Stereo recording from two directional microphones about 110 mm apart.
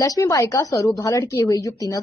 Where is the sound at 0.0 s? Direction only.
30° left (ahead or behind).